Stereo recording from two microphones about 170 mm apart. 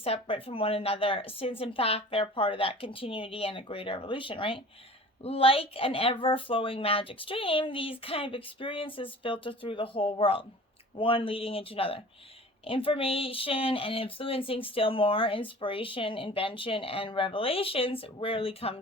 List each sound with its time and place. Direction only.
0.0 s speech: 35° left (ahead or behind)